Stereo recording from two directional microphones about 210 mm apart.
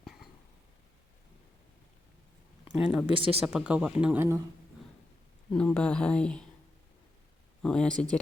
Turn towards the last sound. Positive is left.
turn(degrees=5)  # may be behind; listen again after turning